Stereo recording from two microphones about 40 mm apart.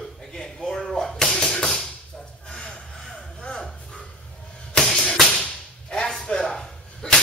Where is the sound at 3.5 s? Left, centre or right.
Centre.